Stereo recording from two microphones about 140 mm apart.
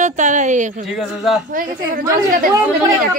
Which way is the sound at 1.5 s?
70° right (ahead or behind).